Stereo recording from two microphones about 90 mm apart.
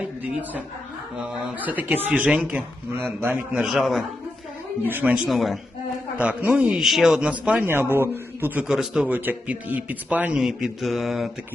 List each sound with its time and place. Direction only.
1.5 s speech: 20° right (ahead or behind)
2.9 s speech: 25° right (ahead or behind)
3.5 s mantra: 5° right (ahead or behind)
4.8 s speech: 20° right (ahead or behind)
5.1 s mantra: 5° right (ahead or behind)
6.2 s a man's voice: 15° right (ahead or behind)
7.6 s a man's voice: 25° right (ahead or behind)
8.6 s a man's voice: 5° right (ahead or behind)
9.1 s speech: 20° right (ahead or behind)
10.4 s mantra: 5° right (ahead or behind)